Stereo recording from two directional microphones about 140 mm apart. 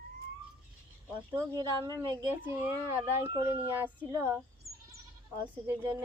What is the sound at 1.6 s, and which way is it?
Speech, 30° right (ahead or behind).